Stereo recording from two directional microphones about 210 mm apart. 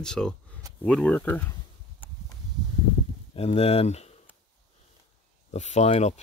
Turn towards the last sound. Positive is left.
turn(degrees=30)  # may be behind; listen again after turning